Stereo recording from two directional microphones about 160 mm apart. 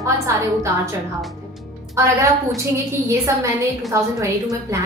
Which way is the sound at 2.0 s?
20° right (ahead or behind).